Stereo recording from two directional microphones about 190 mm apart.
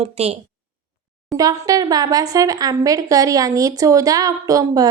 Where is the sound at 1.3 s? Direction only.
20° right (ahead or behind).